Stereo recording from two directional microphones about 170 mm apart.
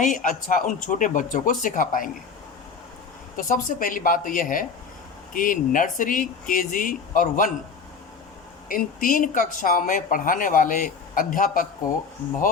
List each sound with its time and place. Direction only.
0.0 s speech: 50° left (ahead or behind)
3.3 s speech: 55° left (ahead or behind)
8.7 s speech: 55° left (ahead or behind)